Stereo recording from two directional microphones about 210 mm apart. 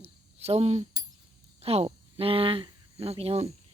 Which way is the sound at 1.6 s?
30° right (ahead or behind).